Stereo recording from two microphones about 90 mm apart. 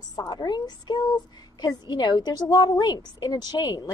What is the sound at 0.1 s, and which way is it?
A woman's voice, 45° left (ahead or behind).